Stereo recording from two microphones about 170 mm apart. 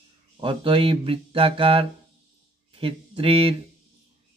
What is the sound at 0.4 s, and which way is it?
Speech, 30° right (ahead or behind).